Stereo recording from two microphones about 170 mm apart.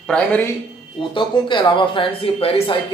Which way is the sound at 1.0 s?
30° left (ahead or behind).